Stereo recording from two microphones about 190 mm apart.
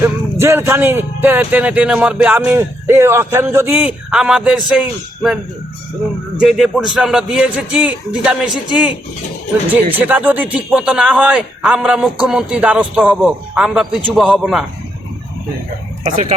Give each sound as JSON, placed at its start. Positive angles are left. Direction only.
{"t": 0.0, "sound": "speech", "side_deg": -10}
{"t": 6.4, "sound": "a man's voice", "side_deg": 0}
{"t": 10.1, "sound": "a man's voice", "side_deg": -10}